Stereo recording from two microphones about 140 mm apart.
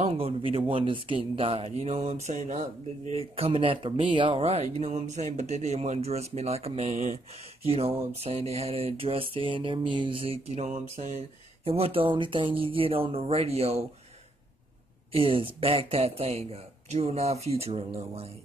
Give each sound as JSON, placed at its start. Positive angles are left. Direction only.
{"t": 0.0, "sound": "speech", "side_deg": -45}
{"t": 11.6, "sound": "speech", "side_deg": -45}
{"t": 15.1, "sound": "speech", "side_deg": -40}